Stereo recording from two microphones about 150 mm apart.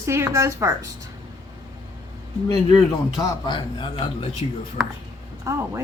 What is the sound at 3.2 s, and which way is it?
A man's voice, 25° left (ahead or behind).